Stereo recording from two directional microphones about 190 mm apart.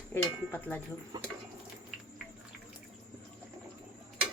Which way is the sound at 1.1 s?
20° right (ahead or behind).